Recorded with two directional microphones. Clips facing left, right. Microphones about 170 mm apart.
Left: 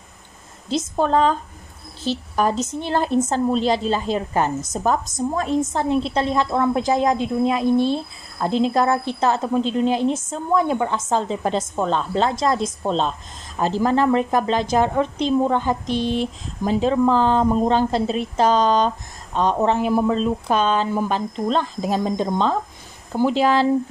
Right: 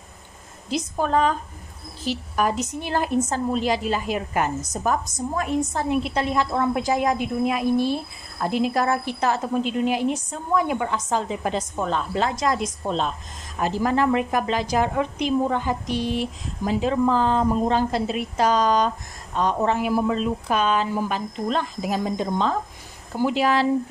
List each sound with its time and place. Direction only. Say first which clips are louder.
0.7 s speech: left 4 dB; 25° left (ahead or behind)
5.7 s speech: left 3 dB; 25° left (ahead or behind)